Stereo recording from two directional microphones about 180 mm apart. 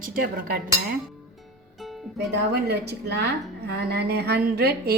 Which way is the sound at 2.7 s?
65° right (ahead or behind).